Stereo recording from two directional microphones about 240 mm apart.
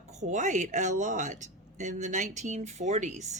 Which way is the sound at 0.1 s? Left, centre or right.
Right.